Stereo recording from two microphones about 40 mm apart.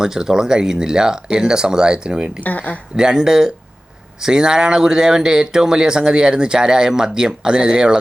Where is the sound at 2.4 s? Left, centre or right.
Left.